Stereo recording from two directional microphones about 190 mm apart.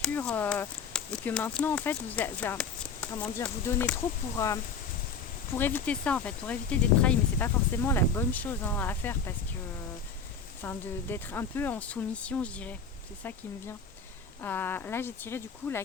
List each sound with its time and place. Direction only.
0.0 s speech: 5° left (ahead or behind)
10.6 s speech: 10° left (ahead or behind)
14.4 s speech: 10° left (ahead or behind)